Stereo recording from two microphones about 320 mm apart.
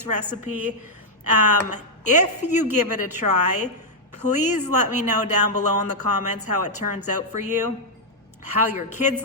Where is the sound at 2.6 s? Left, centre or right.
Right.